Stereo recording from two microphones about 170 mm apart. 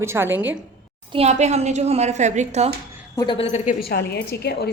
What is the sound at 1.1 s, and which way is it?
A woman's voice, 40° right (ahead or behind).